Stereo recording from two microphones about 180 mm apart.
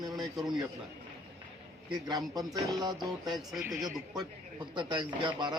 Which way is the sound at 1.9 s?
25° right (ahead or behind).